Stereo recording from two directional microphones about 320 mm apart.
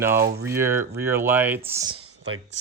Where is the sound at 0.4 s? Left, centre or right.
Centre.